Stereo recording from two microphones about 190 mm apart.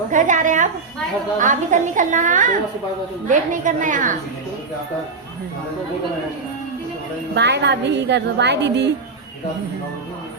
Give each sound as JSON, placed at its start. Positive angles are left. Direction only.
{"t": 0.1, "sound": "a woman's voice", "side_deg": -40}
{"t": 7.3, "sound": "a woman's voice", "side_deg": -65}